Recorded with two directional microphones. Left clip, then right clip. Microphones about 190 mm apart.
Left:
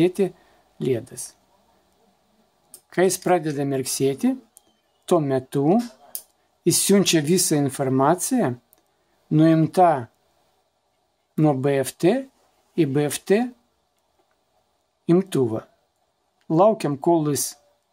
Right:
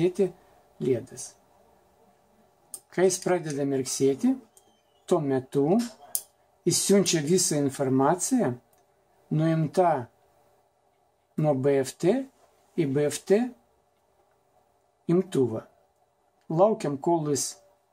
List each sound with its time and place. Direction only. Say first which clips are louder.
0.0 s speech: left 4 dB; 45° left (ahead or behind)
2.9 s speech: left 5 dB; 45° left (ahead or behind)
11.3 s speech: left 3 dB; 50° left (ahead or behind)
15.0 s speech: left 4 dB; 50° left (ahead or behind)